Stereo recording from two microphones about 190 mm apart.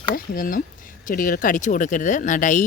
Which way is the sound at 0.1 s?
50° left (ahead or behind).